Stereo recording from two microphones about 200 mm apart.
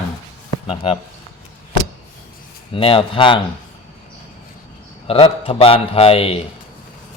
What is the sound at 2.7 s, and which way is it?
Speech, 25° left (ahead or behind).